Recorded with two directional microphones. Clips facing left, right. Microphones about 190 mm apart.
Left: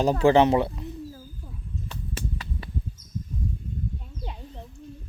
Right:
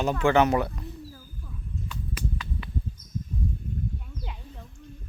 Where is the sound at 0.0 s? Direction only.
35° left (ahead or behind).